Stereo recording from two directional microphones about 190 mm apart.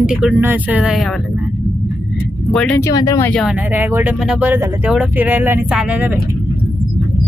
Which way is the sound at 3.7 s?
10° right (ahead or behind).